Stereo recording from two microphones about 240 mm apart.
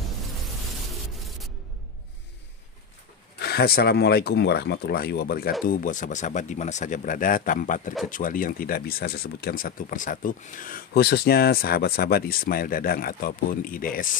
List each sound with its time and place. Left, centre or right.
3.3 s speech: left